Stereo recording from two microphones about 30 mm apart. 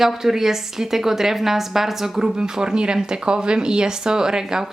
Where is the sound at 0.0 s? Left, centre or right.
Centre.